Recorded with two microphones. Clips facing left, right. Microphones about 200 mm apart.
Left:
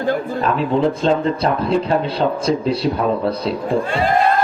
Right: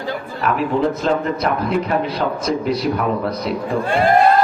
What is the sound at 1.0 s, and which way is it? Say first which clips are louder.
Speech: left 2 dB; 30° left (ahead or behind).